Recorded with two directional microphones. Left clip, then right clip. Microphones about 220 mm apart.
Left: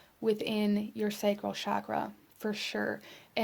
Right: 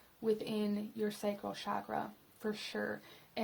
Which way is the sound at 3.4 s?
45° left (ahead or behind).